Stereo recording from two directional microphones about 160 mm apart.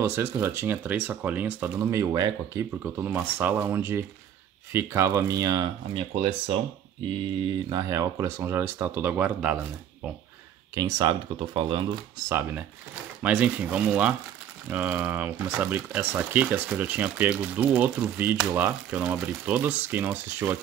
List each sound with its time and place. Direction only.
0.0 s speech: 15° right (ahead or behind); by 6.5 s 35° right (ahead or behind)
7.4 s speech: 20° right (ahead or behind)
10.7 s speech: 25° right (ahead or behind)
12.3 s speech: 15° right (ahead or behind)